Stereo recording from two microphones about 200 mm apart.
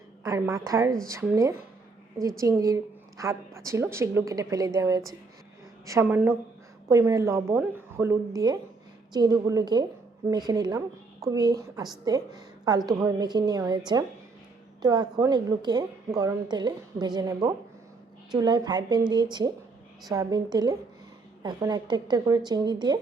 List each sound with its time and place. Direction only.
0.2 s a woman's voice: 15° right (ahead or behind)